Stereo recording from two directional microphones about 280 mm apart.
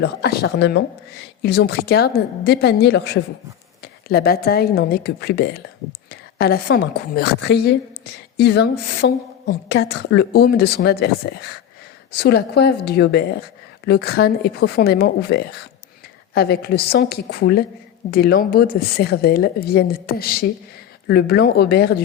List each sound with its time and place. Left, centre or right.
0.0 s a woman's voice: left